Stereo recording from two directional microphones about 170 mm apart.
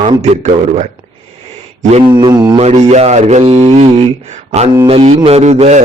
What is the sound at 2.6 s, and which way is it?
A man's voice, 40° right (ahead or behind).